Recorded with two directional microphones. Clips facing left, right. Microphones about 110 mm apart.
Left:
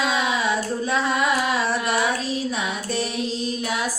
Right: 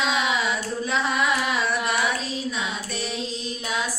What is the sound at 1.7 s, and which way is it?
Child singing, 30° left (ahead or behind).